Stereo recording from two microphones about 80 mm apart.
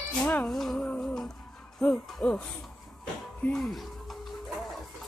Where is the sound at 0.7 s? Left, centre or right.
Centre.